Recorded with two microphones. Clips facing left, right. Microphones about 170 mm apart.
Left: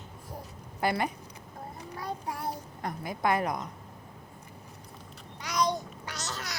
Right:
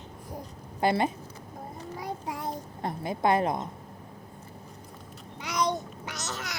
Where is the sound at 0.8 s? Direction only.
25° right (ahead or behind).